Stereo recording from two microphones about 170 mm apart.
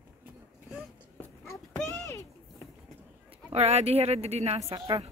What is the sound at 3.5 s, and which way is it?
A woman's voice, 40° right (ahead or behind).